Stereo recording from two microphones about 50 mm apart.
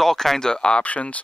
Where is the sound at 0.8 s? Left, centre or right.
Left.